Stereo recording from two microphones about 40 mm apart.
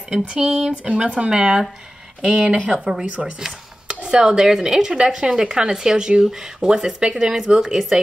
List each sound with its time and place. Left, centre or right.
0.3 s speech: centre
2.6 s speech: right
3.3 s dishes: centre
4.1 s speech: centre